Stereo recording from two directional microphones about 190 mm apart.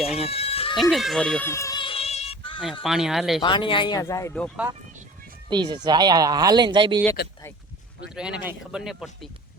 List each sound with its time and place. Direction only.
0.2 s a sound: 30° left (ahead or behind)
0.8 s music: centre (ahead or behind); by 2.6 s 30° left (ahead or behind)
2.8 s speech: centre (ahead or behind)
3.4 s speech: 25° left (ahead or behind)
5.5 s speech: 25° right (ahead or behind)
8.1 s speech: 5° right (ahead or behind)